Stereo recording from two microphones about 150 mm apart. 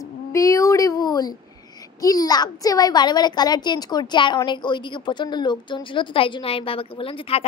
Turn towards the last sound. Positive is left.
turn(degrees=40)  # may be behind; listen again after turning